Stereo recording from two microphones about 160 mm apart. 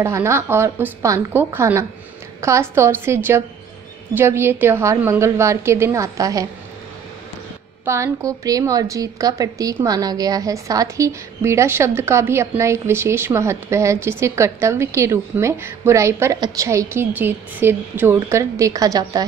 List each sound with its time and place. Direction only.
0.0 s a woman's voice: 15° right (ahead or behind)
7.8 s a woman's voice: 15° right (ahead or behind)